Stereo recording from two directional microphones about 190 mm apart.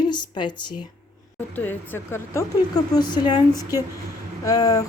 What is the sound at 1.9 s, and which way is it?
Speech, 10° left (ahead or behind).